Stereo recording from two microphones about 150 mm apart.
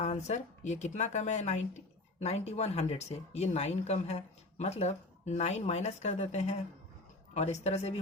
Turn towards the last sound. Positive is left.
turn(degrees=45)  # may be behind; listen again after turning